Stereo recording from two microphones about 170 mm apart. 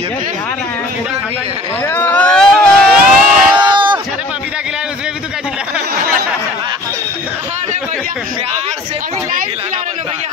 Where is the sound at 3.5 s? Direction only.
25° right (ahead or behind).